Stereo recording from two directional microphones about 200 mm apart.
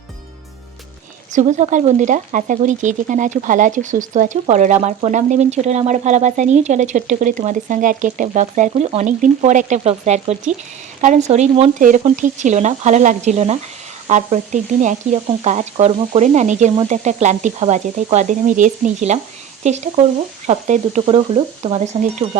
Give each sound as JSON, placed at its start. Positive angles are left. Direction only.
{"t": 1.3, "sound": "speech", "side_deg": -35}